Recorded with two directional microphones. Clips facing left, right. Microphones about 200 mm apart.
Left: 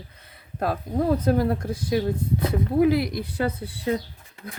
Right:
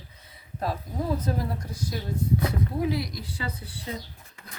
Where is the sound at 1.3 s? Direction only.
60° left (ahead or behind).